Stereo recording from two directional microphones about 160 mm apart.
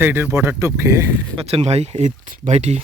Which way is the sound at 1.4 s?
40° right (ahead or behind).